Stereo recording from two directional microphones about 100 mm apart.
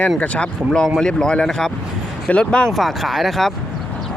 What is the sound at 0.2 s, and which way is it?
Speech, 10° left (ahead or behind).